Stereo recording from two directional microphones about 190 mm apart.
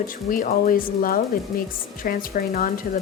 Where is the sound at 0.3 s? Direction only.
45° left (ahead or behind).